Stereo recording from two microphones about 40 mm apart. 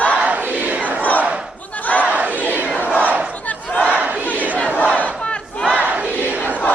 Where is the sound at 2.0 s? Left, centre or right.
Right.